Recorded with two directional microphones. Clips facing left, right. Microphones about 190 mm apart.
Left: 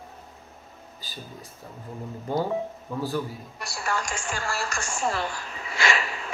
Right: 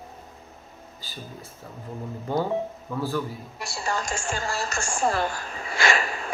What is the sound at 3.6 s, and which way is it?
A woman's voice, 25° right (ahead or behind).